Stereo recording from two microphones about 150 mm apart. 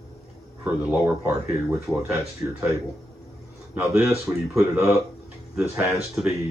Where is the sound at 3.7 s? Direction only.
15° right (ahead or behind).